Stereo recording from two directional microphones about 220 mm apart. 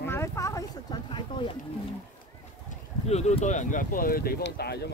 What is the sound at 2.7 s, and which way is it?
Speech, 30° left (ahead or behind).